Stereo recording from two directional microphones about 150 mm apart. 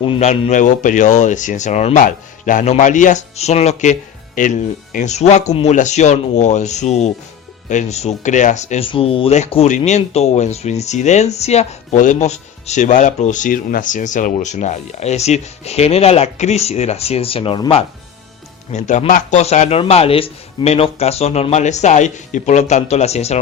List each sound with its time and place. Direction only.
0.0 s speech: 40° left (ahead or behind)
4.4 s speech: 60° left (ahead or behind)
8.9 s speech: 40° left (ahead or behind)
18.7 s speech: 50° left (ahead or behind)